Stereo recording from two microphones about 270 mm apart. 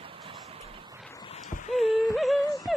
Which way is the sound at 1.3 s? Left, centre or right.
Left.